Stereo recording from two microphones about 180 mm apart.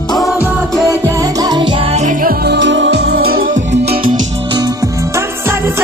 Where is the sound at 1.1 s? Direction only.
20° right (ahead or behind); by 3.6 s 50° right (ahead or behind).